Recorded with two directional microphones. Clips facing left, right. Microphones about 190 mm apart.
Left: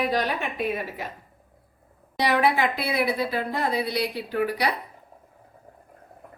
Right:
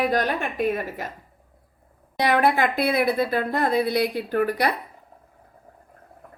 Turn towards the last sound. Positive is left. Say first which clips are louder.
# right 3 dB
turn(degrees=-50)  # may be behind; listen again after turning